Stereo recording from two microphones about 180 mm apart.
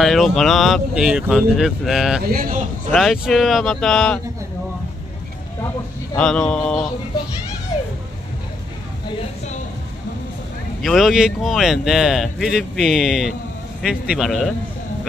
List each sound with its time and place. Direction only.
0.0 s speech: centre (ahead or behind)
2.2 s speech: 50° right (ahead or behind)
2.9 s speech: centre (ahead or behind)
6.1 s speech: 5° left (ahead or behind)
10.8 s speech: centre (ahead or behind)